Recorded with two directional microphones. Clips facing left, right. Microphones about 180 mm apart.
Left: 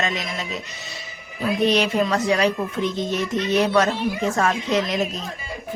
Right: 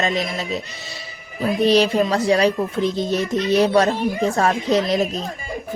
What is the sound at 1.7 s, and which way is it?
Speech, 35° right (ahead or behind).